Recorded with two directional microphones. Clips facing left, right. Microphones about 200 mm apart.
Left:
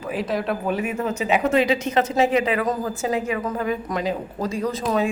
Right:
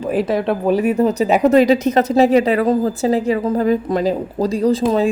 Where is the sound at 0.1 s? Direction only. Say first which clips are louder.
Right 7 dB; 55° right (ahead or behind).